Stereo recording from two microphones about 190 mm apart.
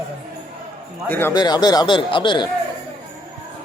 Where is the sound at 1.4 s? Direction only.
20° left (ahead or behind).